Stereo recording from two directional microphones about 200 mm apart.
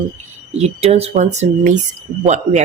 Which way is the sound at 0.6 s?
30° right (ahead or behind).